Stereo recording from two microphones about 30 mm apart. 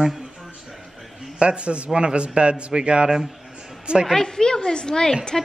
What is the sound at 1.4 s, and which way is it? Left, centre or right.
Speech, right.